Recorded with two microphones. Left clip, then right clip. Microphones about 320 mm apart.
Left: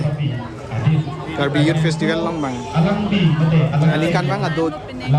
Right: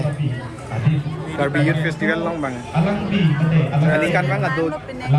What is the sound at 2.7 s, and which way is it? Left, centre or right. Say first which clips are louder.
Speech: left 2 dB; right.